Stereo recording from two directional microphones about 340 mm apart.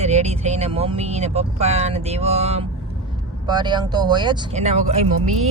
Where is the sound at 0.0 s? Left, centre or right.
Centre.